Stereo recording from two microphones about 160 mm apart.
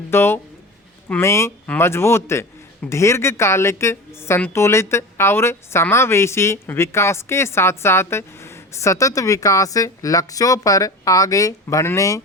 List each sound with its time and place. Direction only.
0.1 s a woman's voice: 15° left (ahead or behind)